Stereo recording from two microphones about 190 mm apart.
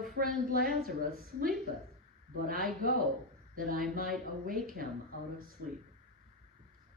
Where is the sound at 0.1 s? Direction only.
50° right (ahead or behind).